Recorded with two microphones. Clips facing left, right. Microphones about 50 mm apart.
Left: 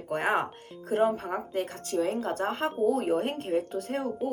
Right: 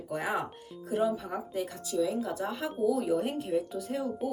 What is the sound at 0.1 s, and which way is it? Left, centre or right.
Speech, left.